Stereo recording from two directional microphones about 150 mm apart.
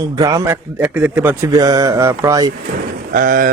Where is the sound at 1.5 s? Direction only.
25° right (ahead or behind).